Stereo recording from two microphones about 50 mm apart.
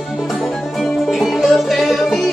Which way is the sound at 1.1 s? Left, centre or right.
Centre.